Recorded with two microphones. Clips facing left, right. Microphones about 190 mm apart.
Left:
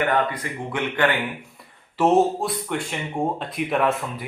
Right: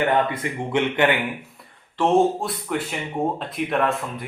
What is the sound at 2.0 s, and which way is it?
Speech, centre (ahead or behind).